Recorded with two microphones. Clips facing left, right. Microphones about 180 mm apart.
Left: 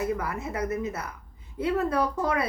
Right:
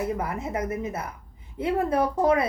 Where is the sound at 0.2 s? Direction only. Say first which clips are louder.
Right 2 dB; 25° right (ahead or behind).